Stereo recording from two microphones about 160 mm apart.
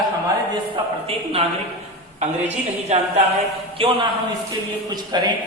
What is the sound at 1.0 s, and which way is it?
A man's voice, 40° right (ahead or behind).